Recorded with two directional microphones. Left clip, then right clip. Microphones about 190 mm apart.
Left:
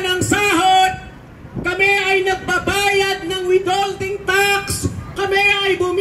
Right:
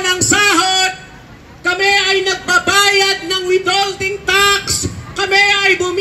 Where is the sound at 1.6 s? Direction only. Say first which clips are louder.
Right 3 dB; 40° right (ahead or behind).